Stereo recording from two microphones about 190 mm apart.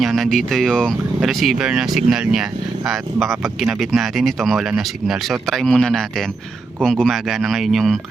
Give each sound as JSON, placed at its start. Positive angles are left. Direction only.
{"t": 0.0, "sound": "speech", "side_deg": 0}